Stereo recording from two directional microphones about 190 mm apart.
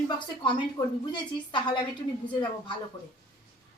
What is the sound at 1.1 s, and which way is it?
Speech, 25° left (ahead or behind).